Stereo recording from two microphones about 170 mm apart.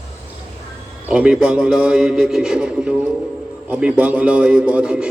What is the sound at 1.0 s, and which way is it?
A man's voice, 5° right (ahead or behind).